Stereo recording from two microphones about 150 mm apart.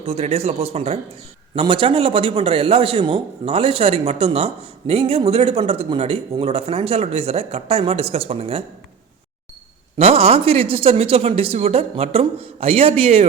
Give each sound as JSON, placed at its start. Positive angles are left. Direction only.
{"t": 0.0, "sound": "a man's voice", "side_deg": -40}
{"t": 10.0, "sound": "a man's voice", "side_deg": -40}